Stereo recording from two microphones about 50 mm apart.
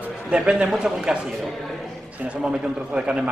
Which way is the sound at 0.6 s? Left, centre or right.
Centre.